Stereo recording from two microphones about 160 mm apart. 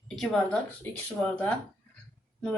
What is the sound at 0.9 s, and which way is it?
Speech, 10° left (ahead or behind).